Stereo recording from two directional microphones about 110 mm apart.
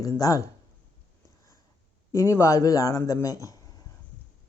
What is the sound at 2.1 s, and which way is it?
Speech, 25° left (ahead or behind).